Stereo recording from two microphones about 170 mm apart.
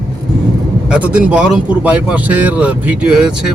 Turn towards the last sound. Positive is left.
turn(degrees=-5)  # may be behind; listen again after turning